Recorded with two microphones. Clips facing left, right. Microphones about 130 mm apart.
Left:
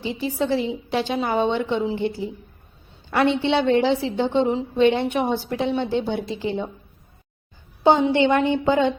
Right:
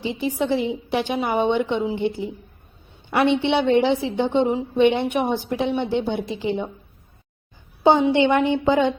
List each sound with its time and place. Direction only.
0.0 s a woman's voice: 20° right (ahead or behind)
7.9 s a woman's voice: 15° right (ahead or behind)